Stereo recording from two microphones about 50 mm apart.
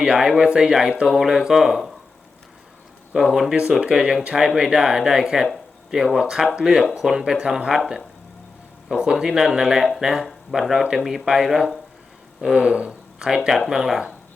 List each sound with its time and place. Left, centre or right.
0.0 s speech: centre
3.1 s speech: centre
8.9 s speech: centre